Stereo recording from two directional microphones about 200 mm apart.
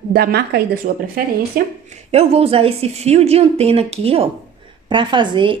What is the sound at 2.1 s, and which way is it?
Speech, 30° right (ahead or behind).